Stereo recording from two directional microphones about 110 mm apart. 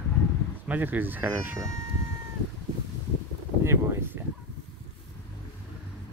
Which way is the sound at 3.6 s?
20° right (ahead or behind).